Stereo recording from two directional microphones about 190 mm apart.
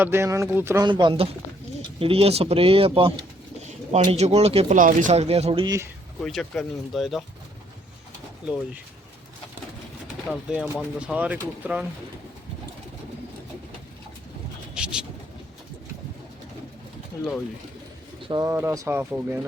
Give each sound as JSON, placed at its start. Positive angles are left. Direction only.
{"t": 0.0, "sound": "speech", "side_deg": -10}
{"t": 0.9, "sound": "speech", "side_deg": -25}
{"t": 6.2, "sound": "speech", "side_deg": 5}
{"t": 10.2, "sound": "speech", "side_deg": -5}
{"t": 14.8, "sound": "bird", "side_deg": -5}
{"t": 18.3, "sound": "speech", "side_deg": -15}